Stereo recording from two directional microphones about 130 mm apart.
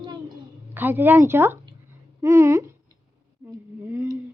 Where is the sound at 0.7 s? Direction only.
15° right (ahead or behind).